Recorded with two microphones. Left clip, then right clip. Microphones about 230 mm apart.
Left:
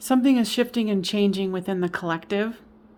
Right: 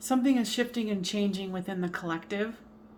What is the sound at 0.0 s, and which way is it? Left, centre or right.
A woman's voice, left.